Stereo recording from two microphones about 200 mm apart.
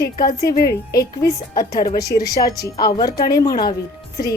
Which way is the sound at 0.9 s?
15° left (ahead or behind).